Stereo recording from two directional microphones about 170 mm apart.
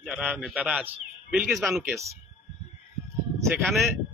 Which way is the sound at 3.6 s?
Centre (ahead or behind).